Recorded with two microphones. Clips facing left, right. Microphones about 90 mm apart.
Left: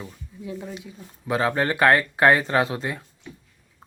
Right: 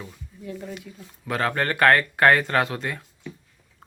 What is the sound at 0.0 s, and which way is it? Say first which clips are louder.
A woman's voice: left 1 dB; 15° left (ahead or behind).